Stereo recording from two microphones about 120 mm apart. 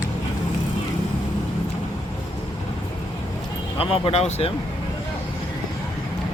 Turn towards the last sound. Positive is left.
turn(degrees=60)  # may be behind; listen again after turning